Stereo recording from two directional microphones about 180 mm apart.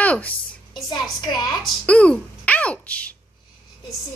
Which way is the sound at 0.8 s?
20° left (ahead or behind).